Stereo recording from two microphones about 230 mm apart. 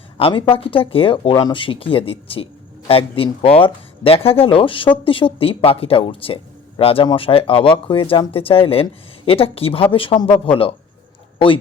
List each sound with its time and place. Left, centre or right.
0.2 s speech: left